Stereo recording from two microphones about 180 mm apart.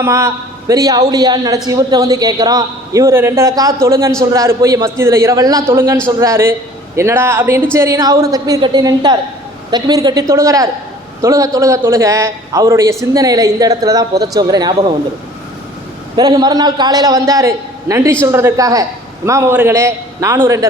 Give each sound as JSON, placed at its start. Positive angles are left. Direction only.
{"t": 0.0, "sound": "a man's voice", "side_deg": -15}
{"t": 16.1, "sound": "a man's voice", "side_deg": -20}